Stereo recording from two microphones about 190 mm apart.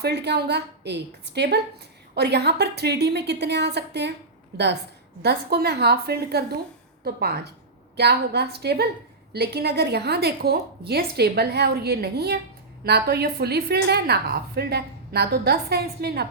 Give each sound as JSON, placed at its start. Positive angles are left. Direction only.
{"t": 0.0, "sound": "a woman's voice", "side_deg": -60}